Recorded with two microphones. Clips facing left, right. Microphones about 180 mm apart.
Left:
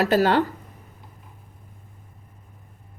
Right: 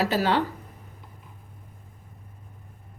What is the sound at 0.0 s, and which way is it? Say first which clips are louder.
Speech: left 4 dB; 50° left (ahead or behind).